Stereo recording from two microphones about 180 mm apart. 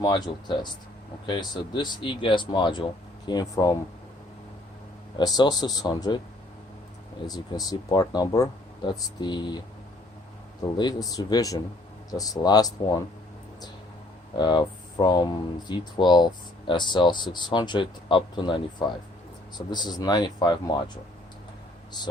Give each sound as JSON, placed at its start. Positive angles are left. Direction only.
{"t": 0.0, "sound": "speech", "side_deg": 25}
{"t": 5.1, "sound": "speech", "side_deg": 25}
{"t": 7.3, "sound": "speech", "side_deg": 20}
{"t": 14.3, "sound": "speech", "side_deg": 25}